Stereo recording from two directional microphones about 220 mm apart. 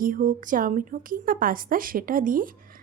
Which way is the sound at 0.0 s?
40° right (ahead or behind).